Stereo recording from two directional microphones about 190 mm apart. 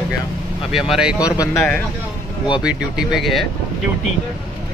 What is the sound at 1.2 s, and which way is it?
Speech, 20° left (ahead or behind).